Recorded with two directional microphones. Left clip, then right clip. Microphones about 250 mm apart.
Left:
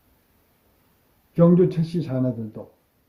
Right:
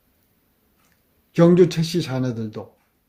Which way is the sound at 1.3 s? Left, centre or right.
Right.